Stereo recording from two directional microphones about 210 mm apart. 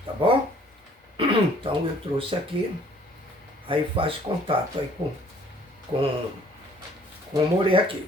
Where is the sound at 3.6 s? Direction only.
25° right (ahead or behind).